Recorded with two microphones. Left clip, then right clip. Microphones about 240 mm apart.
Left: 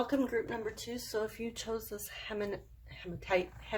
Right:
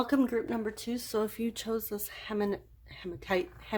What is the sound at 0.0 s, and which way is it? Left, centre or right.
Speech, right.